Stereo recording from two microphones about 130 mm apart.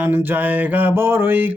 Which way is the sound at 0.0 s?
15° right (ahead or behind).